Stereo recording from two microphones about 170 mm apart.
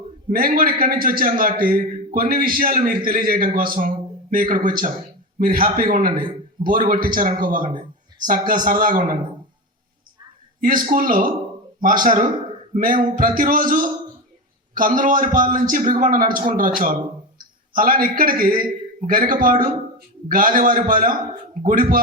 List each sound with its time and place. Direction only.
0.3 s a man's voice: 55° right (ahead or behind)
10.6 s a man's voice: 55° right (ahead or behind)